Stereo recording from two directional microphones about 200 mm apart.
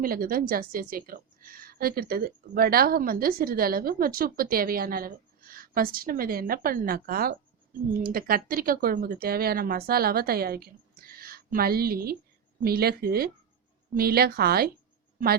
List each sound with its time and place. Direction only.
0.0 s a woman's voice: 45° right (ahead or behind)